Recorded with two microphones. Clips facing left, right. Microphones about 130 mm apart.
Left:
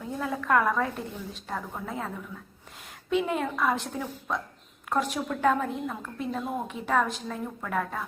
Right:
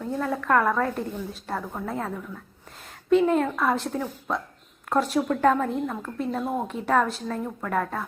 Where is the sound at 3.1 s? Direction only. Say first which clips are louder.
Right 7 dB; 5° left (ahead or behind).